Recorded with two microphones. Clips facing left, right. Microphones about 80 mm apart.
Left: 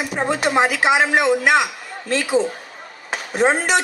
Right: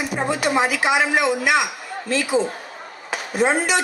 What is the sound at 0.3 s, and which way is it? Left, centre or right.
Speech, left.